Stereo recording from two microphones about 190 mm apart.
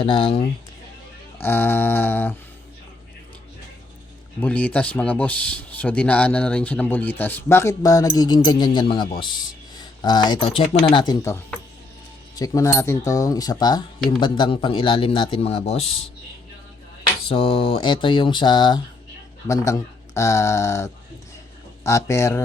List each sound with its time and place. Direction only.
0.0 s speech: 30° left (ahead or behind)
1.4 s speech: 10° left (ahead or behind)
4.4 s speech: 10° left (ahead or behind)
12.4 s speech: 15° left (ahead or behind); by 15.9 s 35° left (ahead or behind)
17.2 s speech: 30° left (ahead or behind)